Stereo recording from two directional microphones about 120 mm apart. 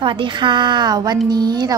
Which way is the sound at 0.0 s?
45° right (ahead or behind).